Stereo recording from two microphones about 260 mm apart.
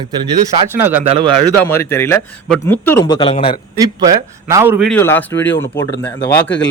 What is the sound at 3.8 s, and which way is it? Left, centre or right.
A man's voice, centre.